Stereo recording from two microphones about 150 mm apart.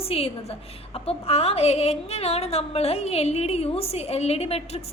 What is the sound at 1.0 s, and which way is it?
A woman's voice, 45° left (ahead or behind).